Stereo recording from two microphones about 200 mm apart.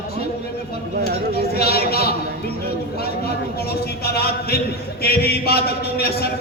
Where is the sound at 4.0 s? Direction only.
50° left (ahead or behind).